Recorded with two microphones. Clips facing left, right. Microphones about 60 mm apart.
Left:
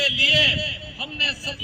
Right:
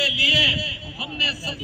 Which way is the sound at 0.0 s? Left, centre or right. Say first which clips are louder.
Even; left.